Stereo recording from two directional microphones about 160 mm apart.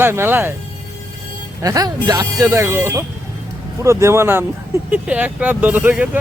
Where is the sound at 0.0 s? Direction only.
15° right (ahead or behind).